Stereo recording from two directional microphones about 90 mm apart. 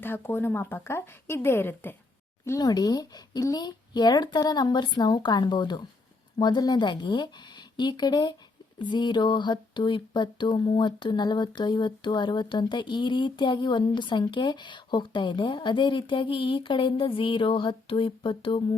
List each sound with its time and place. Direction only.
0.0 s speech: 25° left (ahead or behind)
2.4 s speech: 35° left (ahead or behind)
2.6 s speech: 45° left (ahead or behind)
6.4 s a sound: 50° left (ahead or behind); by 18.6 s 75° left (ahead or behind)